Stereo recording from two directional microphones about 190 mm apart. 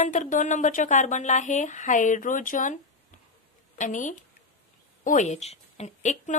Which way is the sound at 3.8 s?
40° left (ahead or behind).